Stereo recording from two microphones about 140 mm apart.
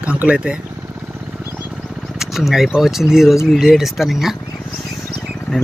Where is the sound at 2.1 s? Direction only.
Centre (ahead or behind).